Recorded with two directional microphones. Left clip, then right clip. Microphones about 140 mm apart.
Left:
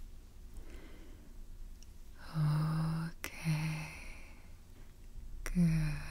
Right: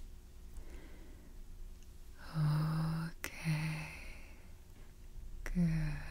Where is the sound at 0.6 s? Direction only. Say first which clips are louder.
Left 2 dB; 5° left (ahead or behind).